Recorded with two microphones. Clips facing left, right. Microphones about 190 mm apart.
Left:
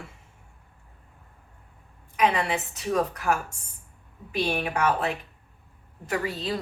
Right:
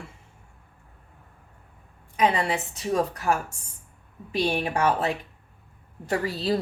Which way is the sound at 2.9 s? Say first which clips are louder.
Right 1 dB; 30° right (ahead or behind).